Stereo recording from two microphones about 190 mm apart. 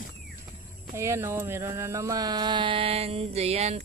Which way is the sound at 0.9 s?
15° right (ahead or behind).